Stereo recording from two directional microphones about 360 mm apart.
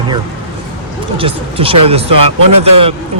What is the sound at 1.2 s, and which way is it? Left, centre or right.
Speech, centre.